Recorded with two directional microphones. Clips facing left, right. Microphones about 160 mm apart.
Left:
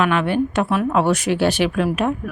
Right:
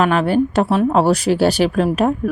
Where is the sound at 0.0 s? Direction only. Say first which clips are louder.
Right 3 dB; 35° right (ahead or behind).